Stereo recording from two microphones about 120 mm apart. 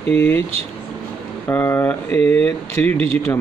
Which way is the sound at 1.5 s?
15° left (ahead or behind).